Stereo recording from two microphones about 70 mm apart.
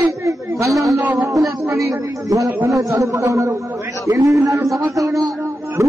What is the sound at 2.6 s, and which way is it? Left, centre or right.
A man's voice, right.